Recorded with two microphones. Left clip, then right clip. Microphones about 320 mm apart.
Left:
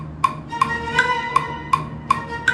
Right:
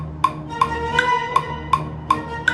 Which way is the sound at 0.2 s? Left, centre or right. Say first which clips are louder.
Even; right.